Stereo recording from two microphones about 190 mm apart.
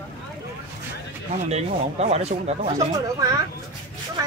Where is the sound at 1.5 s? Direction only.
35° right (ahead or behind).